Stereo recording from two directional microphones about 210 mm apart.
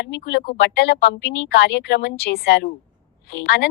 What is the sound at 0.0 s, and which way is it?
A woman's voice, 50° left (ahead or behind).